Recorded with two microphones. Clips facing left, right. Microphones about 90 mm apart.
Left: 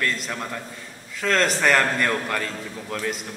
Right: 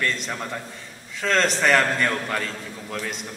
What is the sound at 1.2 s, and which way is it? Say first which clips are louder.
A man's voice: even; centre (ahead or behind).